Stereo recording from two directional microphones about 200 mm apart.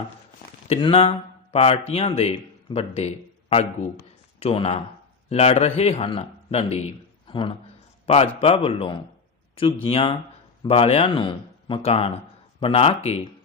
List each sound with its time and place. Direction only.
0.7 s a man's voice: 25° left (ahead or behind)